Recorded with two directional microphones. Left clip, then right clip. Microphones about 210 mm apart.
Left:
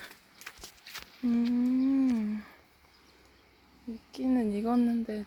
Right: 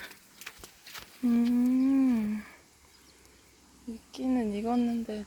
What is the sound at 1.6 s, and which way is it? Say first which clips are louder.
Humming: right 1 dB; centre (ahead or behind).